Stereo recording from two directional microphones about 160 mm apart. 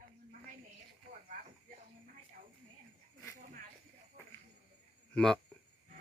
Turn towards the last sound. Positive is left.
turn(degrees=5)  # may be behind; listen again after turning